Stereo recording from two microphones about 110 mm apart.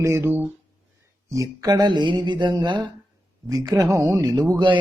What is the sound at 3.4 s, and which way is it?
Speech, 30° right (ahead or behind).